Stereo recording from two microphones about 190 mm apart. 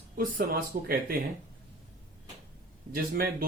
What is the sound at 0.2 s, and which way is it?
Speech, 50° right (ahead or behind).